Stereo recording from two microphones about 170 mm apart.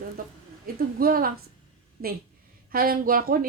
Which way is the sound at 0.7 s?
60° right (ahead or behind).